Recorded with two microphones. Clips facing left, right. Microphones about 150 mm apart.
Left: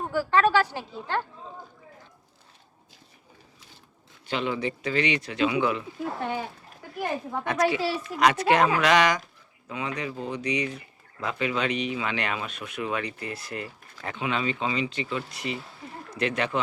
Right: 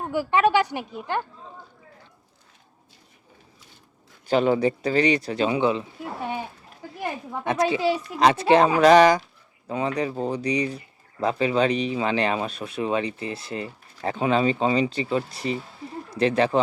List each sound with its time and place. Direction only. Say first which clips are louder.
0.1 s a woman's voice: right 2 dB; 15° right (ahead or behind)
4.3 s speech: right 8 dB; 40° right (ahead or behind)
7.4 s speech: right 4 dB; 25° right (ahead or behind)
8.2 s speech: right 4 dB; 30° right (ahead or behind)